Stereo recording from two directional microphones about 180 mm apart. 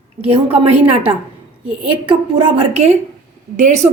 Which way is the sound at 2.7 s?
35° right (ahead or behind).